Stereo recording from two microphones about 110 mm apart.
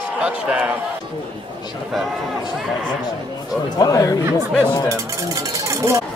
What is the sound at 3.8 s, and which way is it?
Speech, 35° left (ahead or behind).